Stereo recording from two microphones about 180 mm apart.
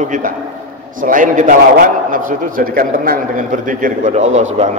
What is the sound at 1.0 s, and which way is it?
A man's voice, 45° right (ahead or behind).